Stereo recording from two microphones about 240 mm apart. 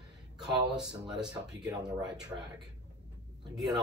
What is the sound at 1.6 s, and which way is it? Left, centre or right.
Speech, centre.